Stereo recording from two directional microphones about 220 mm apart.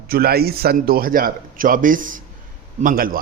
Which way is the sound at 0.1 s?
45° right (ahead or behind).